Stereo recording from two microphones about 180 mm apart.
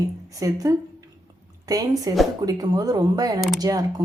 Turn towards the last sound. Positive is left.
turn(degrees=-20)  # may be behind; listen again after turning